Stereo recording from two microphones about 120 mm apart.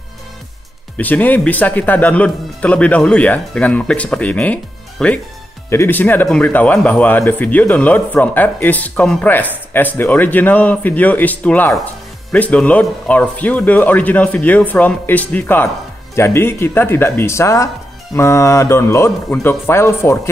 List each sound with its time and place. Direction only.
0.9 s speech: 15° left (ahead or behind)